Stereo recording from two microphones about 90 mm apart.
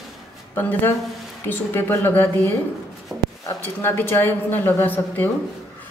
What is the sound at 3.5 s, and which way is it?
A woman's voice, 25° left (ahead or behind).